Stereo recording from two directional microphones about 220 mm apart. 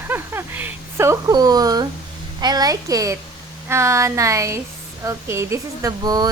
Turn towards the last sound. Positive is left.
turn(degrees=-15)  # may be behind; listen again after turning